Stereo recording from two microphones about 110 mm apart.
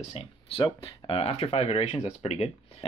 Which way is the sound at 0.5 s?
45° left (ahead or behind).